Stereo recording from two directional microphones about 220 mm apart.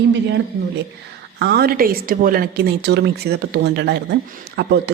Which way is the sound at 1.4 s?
45° right (ahead or behind).